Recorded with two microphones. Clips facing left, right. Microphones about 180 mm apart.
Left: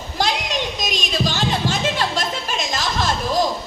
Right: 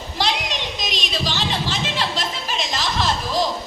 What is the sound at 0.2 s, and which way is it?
Children playing, 50° left (ahead or behind).